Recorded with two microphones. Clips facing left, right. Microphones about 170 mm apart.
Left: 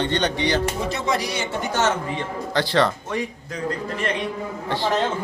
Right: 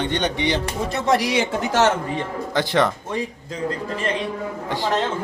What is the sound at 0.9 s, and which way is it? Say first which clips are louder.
Speech: right 5 dB; 85° right.